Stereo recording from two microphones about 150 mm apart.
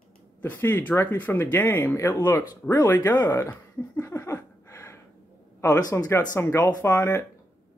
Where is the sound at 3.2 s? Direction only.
15° left (ahead or behind).